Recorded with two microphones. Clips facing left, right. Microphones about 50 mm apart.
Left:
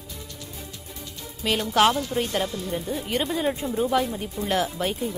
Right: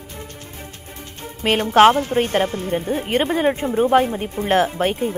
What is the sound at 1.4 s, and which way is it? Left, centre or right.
A woman's voice, right.